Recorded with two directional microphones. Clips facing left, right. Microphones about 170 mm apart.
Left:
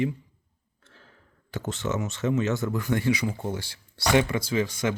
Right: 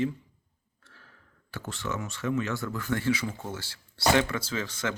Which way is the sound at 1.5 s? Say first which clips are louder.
Left 5 dB; 20° left (ahead or behind).